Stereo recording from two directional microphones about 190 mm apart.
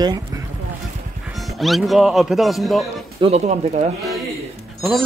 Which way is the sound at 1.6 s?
Centre (ahead or behind).